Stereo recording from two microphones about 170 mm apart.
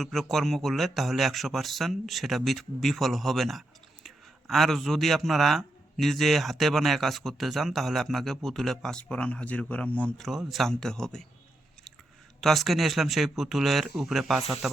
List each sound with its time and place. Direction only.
0.0 s a man's voice: centre (ahead or behind)
12.4 s a man's voice: centre (ahead or behind)